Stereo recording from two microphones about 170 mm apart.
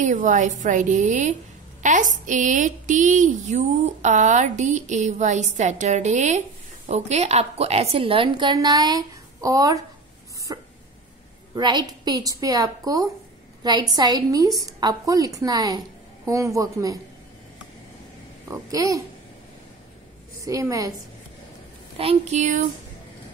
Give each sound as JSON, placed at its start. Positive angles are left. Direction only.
{"t": 0.0, "sound": "a woman's voice", "side_deg": -50}
{"t": 10.5, "sound": "a sound", "side_deg": -25}
{"t": 11.5, "sound": "a woman's voice", "side_deg": -25}
{"t": 18.5, "sound": "a woman's voice", "side_deg": -20}
{"t": 20.4, "sound": "a woman's voice", "side_deg": -20}
{"t": 21.9, "sound": "a woman's voice", "side_deg": -40}